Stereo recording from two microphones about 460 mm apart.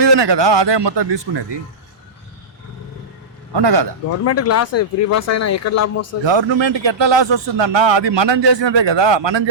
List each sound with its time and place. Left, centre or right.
0.0 s a man's voice: right
3.5 s a man's voice: right
4.3 s speech: left
6.2 s a man's voice: right